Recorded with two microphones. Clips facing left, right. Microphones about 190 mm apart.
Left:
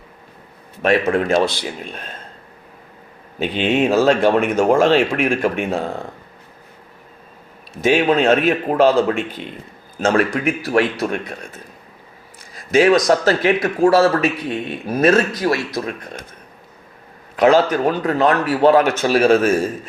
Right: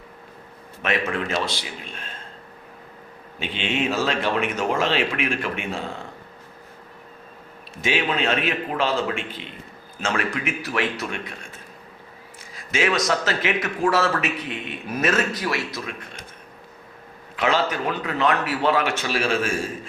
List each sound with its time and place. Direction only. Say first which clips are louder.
0.8 s a man's voice: left 9 dB; 35° left (ahead or behind)
1.1 s speech: left 9 dB; 50° left (ahead or behind)
1.9 s a man's voice: left 5 dB; 40° left (ahead or behind)
3.4 s a man's voice: left 8 dB; 40° left (ahead or behind)
4.1 s speech: left 9 dB; 50° left (ahead or behind)
7.8 s a man's voice: left 9 dB; 45° left (ahead or behind)
12.7 s a man's voice: left 9 dB; 40° left (ahead or behind)
17.3 s a man's voice: left 9 dB; 40° left (ahead or behind)